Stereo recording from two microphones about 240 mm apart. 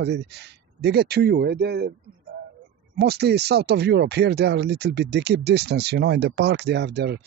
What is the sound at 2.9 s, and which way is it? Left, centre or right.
Speech, right.